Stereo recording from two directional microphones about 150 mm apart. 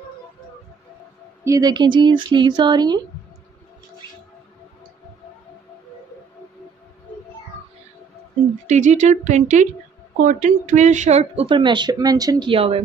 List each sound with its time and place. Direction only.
1.4 s speech: 25° right (ahead or behind)
8.6 s speech: 50° right (ahead or behind)